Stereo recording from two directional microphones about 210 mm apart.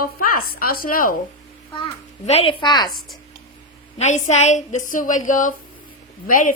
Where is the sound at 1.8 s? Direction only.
30° left (ahead or behind).